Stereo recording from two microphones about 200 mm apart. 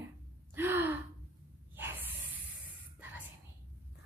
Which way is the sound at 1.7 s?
10° right (ahead or behind).